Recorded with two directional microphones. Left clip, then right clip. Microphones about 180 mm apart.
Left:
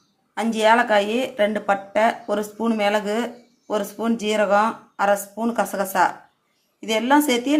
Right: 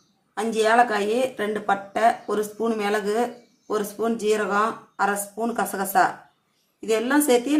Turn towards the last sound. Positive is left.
turn(degrees=25)  # may be behind; listen again after turning